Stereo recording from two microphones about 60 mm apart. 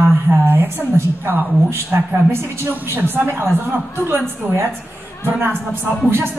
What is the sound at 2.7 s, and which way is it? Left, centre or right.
A woman's voice, right.